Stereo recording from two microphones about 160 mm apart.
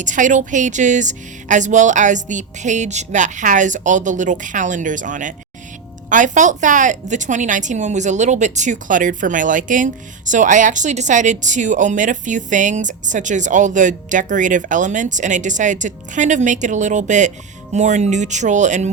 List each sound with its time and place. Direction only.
0.0 s a woman's voice: 50° right (ahead or behind)